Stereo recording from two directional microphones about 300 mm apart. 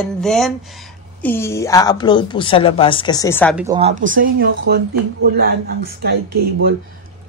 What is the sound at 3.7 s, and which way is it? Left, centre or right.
Speech, centre.